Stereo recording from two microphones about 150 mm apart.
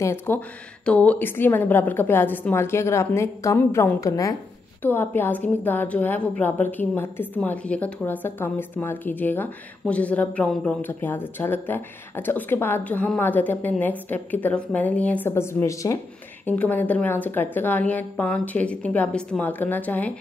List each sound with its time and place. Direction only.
0.0 s a woman's voice: 15° left (ahead or behind)
16.4 s a woman's voice: 10° left (ahead or behind)